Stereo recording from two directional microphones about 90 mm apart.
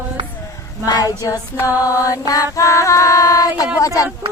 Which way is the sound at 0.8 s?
40° left (ahead or behind).